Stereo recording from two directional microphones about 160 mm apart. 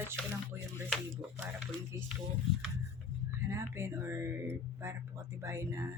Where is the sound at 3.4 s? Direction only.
15° right (ahead or behind).